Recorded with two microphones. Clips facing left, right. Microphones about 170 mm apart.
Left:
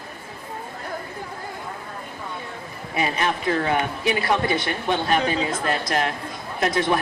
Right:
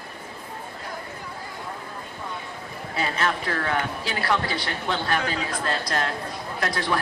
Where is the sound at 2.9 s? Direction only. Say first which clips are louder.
Left 2 dB; 20° left (ahead or behind).